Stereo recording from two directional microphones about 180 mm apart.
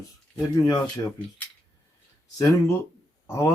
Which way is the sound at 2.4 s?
15° left (ahead or behind).